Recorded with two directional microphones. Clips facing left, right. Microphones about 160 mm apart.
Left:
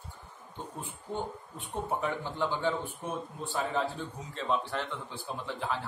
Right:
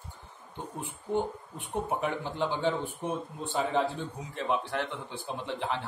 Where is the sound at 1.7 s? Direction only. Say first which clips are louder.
Right 2 dB; 15° right (ahead or behind).